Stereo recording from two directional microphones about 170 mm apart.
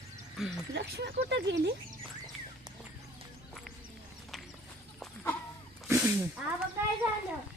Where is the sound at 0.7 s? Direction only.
75° right (ahead or behind).